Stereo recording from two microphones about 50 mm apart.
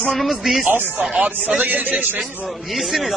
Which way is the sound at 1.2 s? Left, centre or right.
Right.